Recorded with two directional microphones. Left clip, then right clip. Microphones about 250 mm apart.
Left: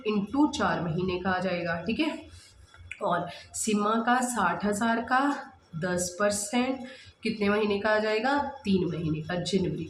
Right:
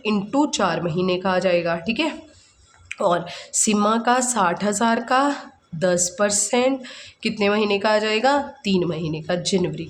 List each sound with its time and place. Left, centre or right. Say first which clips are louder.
0.0 s speech: right 5 dB; right